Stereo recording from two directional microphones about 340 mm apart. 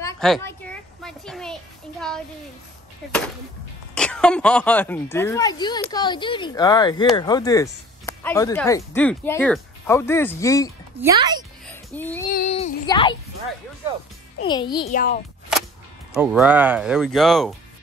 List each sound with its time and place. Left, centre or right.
0.0 s a sound: centre
3.0 s speech: centre
11.0 s speech: centre
11.7 s music: centre
12.4 s female singing: centre
14.4 s speech: centre
14.9 s speech: left
16.2 s speech: centre